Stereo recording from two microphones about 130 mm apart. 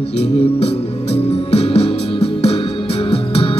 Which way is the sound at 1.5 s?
50° left (ahead or behind).